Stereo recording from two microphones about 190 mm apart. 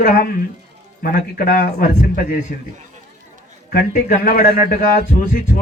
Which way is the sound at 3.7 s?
50° left (ahead or behind).